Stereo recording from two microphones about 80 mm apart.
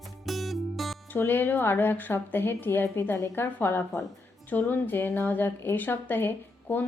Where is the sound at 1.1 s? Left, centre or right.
Left.